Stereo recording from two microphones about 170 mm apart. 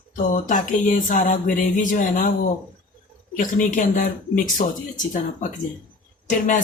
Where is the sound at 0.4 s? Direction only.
50° left (ahead or behind).